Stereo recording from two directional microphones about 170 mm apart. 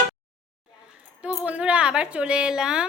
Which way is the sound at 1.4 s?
5° right (ahead or behind).